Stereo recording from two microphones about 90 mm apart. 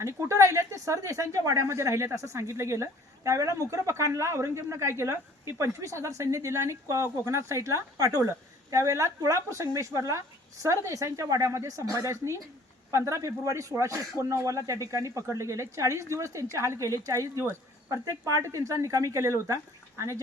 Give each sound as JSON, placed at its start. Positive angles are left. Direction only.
{"t": 0.0, "sound": "speech", "side_deg": -35}